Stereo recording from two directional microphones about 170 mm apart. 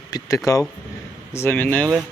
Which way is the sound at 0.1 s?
20° left (ahead or behind).